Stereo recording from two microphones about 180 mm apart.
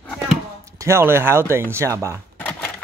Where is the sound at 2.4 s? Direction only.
10° left (ahead or behind).